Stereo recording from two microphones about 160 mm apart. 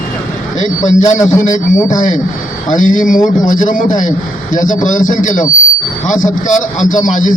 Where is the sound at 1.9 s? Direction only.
50° left (ahead or behind).